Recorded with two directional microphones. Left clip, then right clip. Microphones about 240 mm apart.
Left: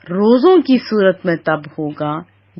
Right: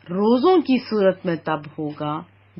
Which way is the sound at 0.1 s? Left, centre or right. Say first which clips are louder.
Left 6 dB; left.